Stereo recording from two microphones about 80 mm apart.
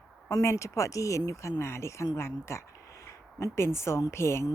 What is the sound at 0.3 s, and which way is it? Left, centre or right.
Speech, left.